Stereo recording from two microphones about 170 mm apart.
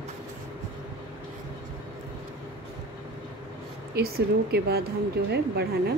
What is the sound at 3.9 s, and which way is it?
Speech, 65° right (ahead or behind).